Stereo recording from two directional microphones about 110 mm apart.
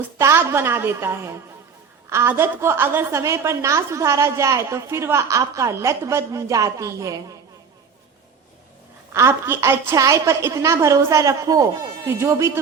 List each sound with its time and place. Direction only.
0.2 s a woman's voice: 25° right (ahead or behind)
9.1 s a woman's voice: 25° right (ahead or behind)